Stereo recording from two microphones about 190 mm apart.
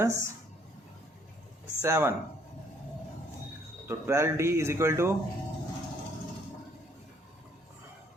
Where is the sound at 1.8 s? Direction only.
15° right (ahead or behind).